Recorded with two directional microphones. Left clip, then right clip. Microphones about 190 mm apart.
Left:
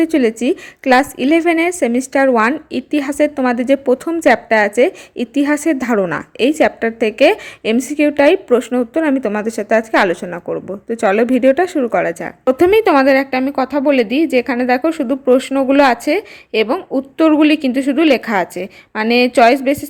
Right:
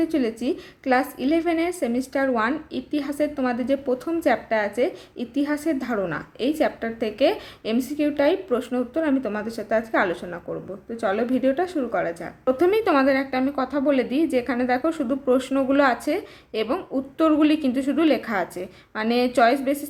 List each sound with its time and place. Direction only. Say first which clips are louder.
0.0 s a woman's voice: left 10 dB; 40° left (ahead or behind)